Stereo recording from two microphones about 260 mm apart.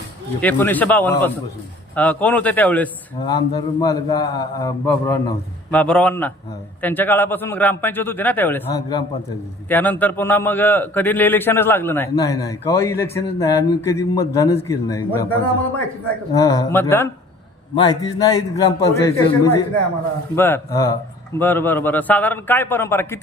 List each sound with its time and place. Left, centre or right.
0.4 s a man's voice: centre